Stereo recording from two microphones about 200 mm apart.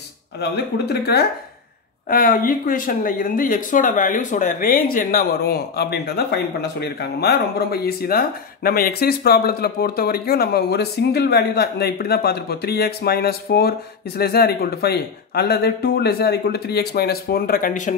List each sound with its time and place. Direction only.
0.4 s speech: 55° left (ahead or behind)